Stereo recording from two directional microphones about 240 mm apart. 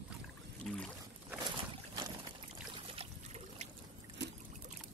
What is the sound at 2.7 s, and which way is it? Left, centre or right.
Trickle, right.